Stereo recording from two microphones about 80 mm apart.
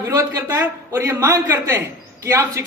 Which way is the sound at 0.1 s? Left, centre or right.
Right.